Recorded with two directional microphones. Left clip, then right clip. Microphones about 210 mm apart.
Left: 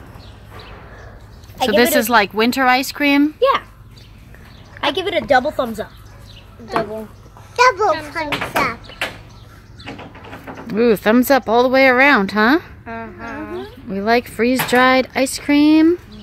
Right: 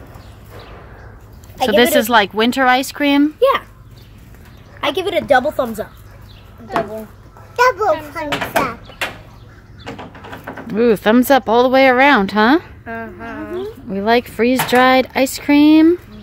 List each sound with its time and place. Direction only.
1.6 s speech: 5° right (ahead or behind)
4.7 s speech: 10° right (ahead or behind)
7.5 s a woman's voice: 15° left (ahead or behind)
10.7 s speech: centre (ahead or behind)
12.8 s a sound: 20° right (ahead or behind)
13.8 s speech: 5° right (ahead or behind)